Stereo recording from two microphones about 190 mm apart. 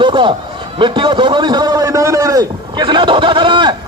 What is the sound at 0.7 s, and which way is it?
A man's voice, 25° right (ahead or behind).